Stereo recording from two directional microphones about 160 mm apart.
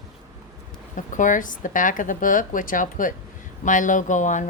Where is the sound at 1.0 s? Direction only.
55° left (ahead or behind).